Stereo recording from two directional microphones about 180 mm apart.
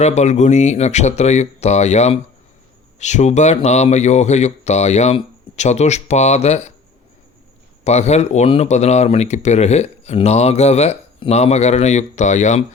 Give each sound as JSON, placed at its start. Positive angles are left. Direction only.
{"t": 0.0, "sound": "speech", "side_deg": 40}
{"t": 7.9, "sound": "speech", "side_deg": 40}